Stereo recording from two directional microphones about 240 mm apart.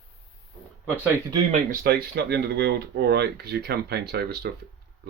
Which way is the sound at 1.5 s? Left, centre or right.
Right.